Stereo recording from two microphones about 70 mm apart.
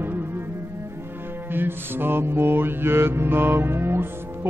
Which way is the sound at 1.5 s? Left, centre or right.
Right.